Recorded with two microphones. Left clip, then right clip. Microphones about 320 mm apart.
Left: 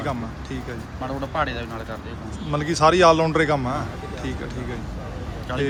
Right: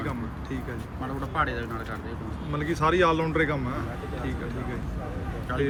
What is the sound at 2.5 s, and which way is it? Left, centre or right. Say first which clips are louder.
Speech: left 7 dB; centre.